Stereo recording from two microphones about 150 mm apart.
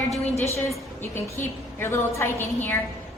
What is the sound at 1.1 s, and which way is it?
A woman's voice, 15° left (ahead or behind).